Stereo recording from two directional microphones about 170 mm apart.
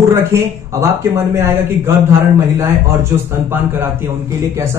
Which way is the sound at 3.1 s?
15° right (ahead or behind).